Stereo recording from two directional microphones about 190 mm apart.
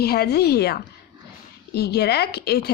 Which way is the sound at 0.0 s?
55° left (ahead or behind).